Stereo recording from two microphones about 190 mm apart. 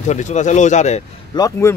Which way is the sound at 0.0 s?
40° left (ahead or behind).